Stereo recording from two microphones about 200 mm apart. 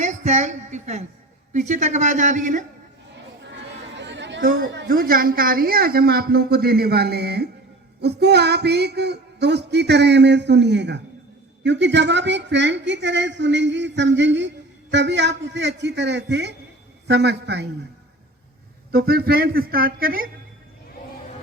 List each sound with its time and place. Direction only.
0.0 s a woman's voice: 35° right (ahead or behind)
3.5 s chatter: 65° right (ahead or behind)
4.4 s a woman's voice: 45° right (ahead or behind)
18.9 s a woman's voice: 50° right (ahead or behind)